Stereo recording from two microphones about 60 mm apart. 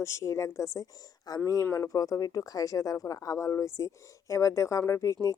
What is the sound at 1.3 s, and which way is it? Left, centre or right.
Speech, left.